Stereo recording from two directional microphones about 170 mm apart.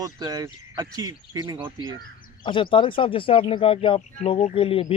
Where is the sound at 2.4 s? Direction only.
30° left (ahead or behind).